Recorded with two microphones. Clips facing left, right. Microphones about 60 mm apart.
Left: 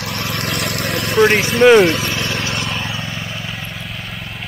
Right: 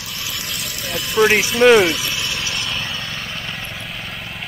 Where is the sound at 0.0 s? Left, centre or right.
Left.